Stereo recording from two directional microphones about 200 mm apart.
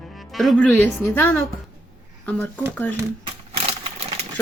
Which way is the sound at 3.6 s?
30° right (ahead or behind).